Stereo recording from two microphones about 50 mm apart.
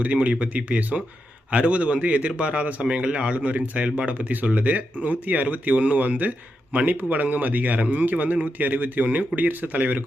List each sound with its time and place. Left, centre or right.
0.0 s a man's voice: right